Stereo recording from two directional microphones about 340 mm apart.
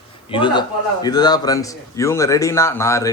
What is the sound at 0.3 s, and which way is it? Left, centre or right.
A man's voice, centre.